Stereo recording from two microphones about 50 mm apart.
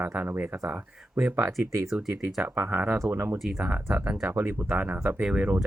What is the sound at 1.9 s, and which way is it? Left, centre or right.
Speech, centre.